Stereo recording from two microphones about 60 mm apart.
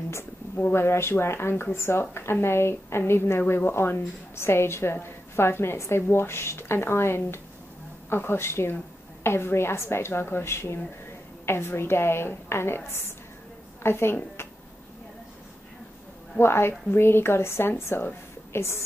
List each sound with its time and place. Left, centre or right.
0.6 s a woman's voice: left
16.3 s speech: left